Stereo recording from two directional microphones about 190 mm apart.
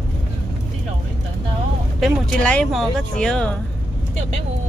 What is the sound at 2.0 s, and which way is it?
Speech, 5° left (ahead or behind).